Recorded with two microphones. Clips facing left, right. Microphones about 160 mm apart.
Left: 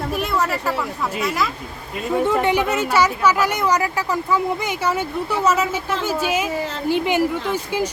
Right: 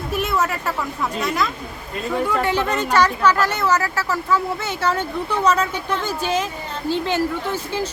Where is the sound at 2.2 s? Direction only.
15° left (ahead or behind).